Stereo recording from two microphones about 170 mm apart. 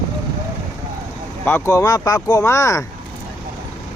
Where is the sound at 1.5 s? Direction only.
15° left (ahead or behind).